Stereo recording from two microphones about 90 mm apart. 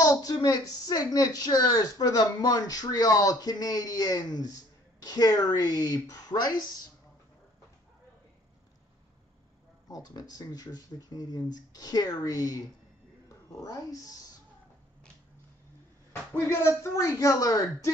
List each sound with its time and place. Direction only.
0.0 s a woman's voice: 45° left (ahead or behind)
9.8 s a woman's voice: 45° left (ahead or behind)
13.3 s cat: 40° left (ahead or behind)
16.1 s speech: 35° left (ahead or behind)